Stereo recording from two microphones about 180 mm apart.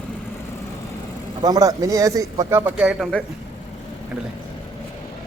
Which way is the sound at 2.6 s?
5° right (ahead or behind).